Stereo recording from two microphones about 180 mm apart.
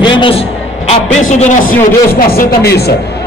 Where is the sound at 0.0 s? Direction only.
30° left (ahead or behind).